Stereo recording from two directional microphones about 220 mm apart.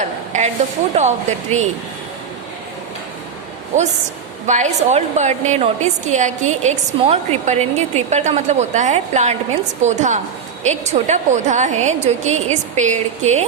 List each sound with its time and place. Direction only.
0.9 s a woman's voice: 30° right (ahead or behind)
3.7 s a woman's voice: 30° right (ahead or behind)